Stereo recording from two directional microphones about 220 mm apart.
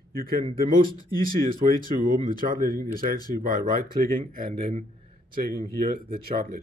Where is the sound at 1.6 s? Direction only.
35° right (ahead or behind).